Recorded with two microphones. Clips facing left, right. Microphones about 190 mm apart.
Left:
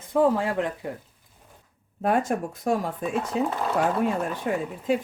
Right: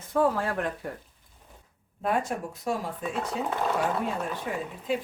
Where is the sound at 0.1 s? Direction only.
15° left (ahead or behind).